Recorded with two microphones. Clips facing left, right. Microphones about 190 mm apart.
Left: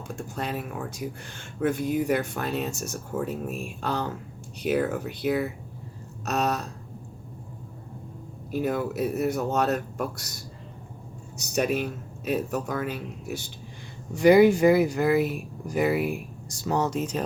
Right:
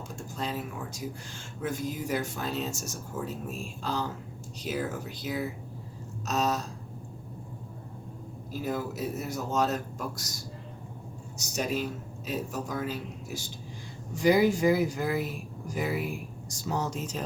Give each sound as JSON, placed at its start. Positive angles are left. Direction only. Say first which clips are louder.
{"t": 0.3, "sound": "speech", "louder": "left 2 dB", "side_deg": 60}
{"t": 8.5, "sound": "speech", "louder": "left 6 dB", "side_deg": 60}
{"t": 11.3, "sound": "speech", "louder": "left 5 dB", "side_deg": 60}